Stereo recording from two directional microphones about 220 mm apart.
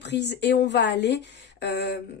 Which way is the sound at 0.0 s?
50° left (ahead or behind).